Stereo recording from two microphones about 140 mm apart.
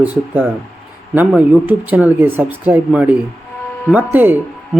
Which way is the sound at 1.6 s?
10° right (ahead or behind).